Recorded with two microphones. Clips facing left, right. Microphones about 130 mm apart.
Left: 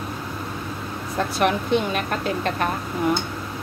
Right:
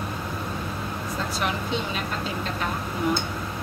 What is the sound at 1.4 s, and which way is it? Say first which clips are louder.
Speech: left 9 dB; 60° left (ahead or behind).